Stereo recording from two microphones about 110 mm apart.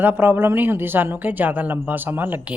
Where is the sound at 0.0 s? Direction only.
15° right (ahead or behind).